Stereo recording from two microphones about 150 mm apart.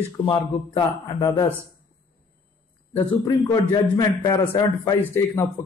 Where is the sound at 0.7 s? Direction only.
30° left (ahead or behind).